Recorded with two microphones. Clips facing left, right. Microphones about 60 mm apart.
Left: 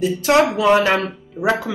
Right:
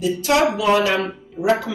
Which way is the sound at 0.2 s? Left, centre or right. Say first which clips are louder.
Left 3 dB; left.